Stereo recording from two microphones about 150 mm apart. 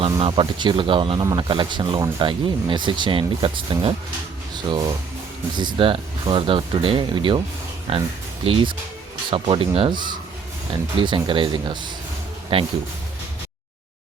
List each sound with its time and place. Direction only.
0.2 s speech: 30° right (ahead or behind)
9.3 s speech: 35° right (ahead or behind)